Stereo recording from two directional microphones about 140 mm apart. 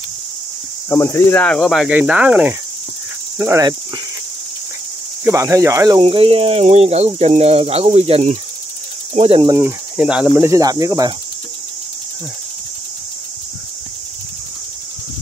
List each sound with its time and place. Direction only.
0.8 s speech: 20° left (ahead or behind); by 2.5 s 10° right (ahead or behind)
3.3 s speech: 25° right (ahead or behind)
5.2 s speech: 20° right (ahead or behind)
5.9 s speech: 40° right (ahead or behind)
9.5 s speech: 20° right (ahead or behind)
9.9 s speech: 5° right (ahead or behind); by 11.1 s 25° right (ahead or behind)